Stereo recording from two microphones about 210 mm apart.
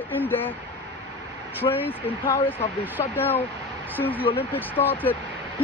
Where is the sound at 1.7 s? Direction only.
25° left (ahead or behind).